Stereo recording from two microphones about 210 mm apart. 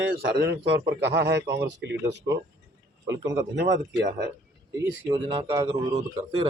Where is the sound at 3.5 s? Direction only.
55° right (ahead or behind).